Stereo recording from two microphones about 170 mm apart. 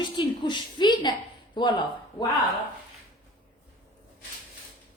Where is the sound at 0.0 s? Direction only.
25° left (ahead or behind).